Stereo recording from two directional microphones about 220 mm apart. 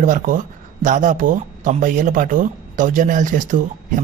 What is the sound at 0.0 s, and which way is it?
Speech, 35° right (ahead or behind).